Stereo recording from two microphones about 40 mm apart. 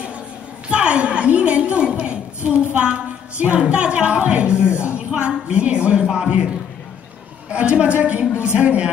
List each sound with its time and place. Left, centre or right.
0.7 s a sound: right
3.4 s a woman's voice: right
7.4 s a woman's voice: right